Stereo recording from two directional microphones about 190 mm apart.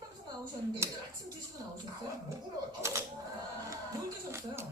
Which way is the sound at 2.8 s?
15° right (ahead or behind).